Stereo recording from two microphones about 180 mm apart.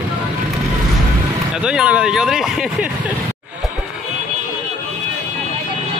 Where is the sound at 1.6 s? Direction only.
5° right (ahead or behind).